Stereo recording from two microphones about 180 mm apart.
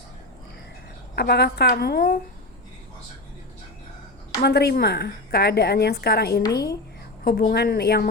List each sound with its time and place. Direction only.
1.1 s a woman's voice: 65° left (ahead or behind)
4.4 s a woman's voice: 65° left (ahead or behind)